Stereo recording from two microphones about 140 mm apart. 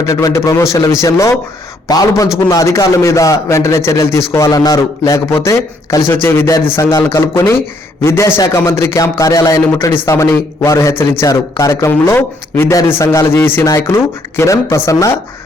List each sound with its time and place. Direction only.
0.0 s a man's voice: 25° left (ahead or behind)